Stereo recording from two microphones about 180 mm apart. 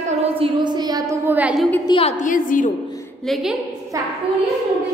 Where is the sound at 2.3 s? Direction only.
50° left (ahead or behind).